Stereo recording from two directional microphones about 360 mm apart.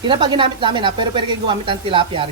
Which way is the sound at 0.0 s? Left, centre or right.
Centre.